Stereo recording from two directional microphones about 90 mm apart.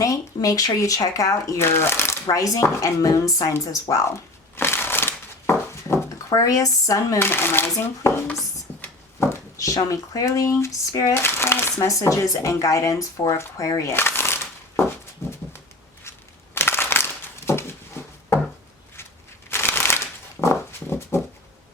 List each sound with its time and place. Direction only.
0.0 s speech: 40° left (ahead or behind)
2.3 s speech: 40° left (ahead or behind)
4.5 s a sound: 25° left (ahead or behind)
7.2 s speech: 25° left (ahead or behind)
9.2 s speech: 40° left (ahead or behind)
11.1 s speech: 25° left (ahead or behind)
13.9 s shuffling cards: 25° left (ahead or behind)
16.6 s crumpling: 25° left (ahead or behind)
18.0 s a sound: 25° left (ahead or behind)
19.5 s a sound: 25° left (ahead or behind)